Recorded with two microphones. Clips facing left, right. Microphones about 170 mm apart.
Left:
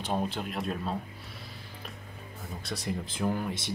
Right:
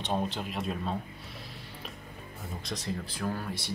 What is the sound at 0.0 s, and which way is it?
Speech, centre (ahead or behind).